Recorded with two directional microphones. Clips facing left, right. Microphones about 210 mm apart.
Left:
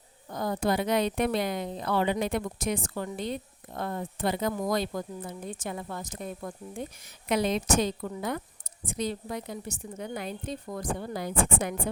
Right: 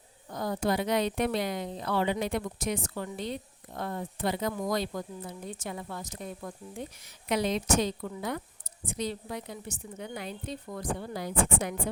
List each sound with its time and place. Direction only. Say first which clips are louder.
0.3 s speech: left 1 dB; 55° left (ahead or behind)